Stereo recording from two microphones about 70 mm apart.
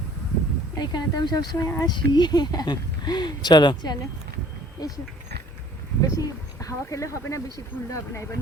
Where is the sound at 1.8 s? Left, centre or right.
Left.